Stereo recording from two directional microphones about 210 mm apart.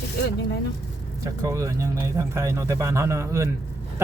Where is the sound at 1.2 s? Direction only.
15° right (ahead or behind).